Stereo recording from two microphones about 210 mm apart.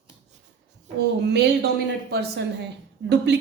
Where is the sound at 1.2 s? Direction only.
55° right (ahead or behind).